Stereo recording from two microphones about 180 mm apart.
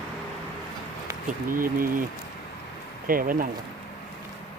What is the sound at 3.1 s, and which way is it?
Speech, 50° right (ahead or behind).